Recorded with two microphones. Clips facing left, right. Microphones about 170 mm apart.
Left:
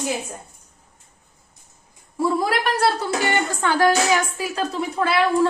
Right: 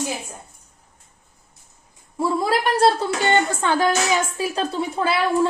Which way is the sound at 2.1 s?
30° right (ahead or behind).